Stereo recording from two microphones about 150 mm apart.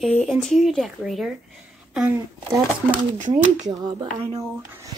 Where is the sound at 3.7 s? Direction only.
25° right (ahead or behind).